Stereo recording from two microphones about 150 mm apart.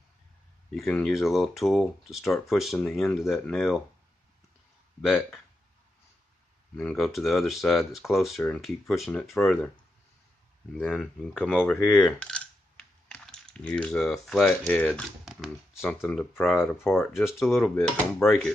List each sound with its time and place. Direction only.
0.7 s speech: 5° left (ahead or behind)
5.0 s speech: centre (ahead or behind)
6.8 s speech: 5° left (ahead or behind)
10.7 s speech: centre (ahead or behind)
11.6 s coin: 5° left (ahead or behind)
14.9 s speech: centre (ahead or behind)
16.9 s speech: 15° left (ahead or behind)
17.3 s speech: centre (ahead or behind)